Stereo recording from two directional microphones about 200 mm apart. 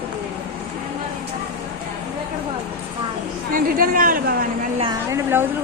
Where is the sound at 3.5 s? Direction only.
45° right (ahead or behind).